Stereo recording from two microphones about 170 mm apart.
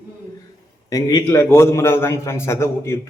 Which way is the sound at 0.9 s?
20° left (ahead or behind).